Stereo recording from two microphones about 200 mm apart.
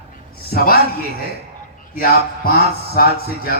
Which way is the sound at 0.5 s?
50° left (ahead or behind).